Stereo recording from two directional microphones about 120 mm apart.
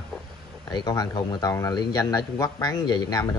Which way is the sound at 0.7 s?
35° left (ahead or behind).